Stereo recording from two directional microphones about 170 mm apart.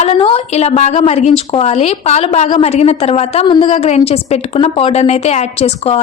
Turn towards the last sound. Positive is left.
turn(degrees=40)  # may be behind; listen again after turning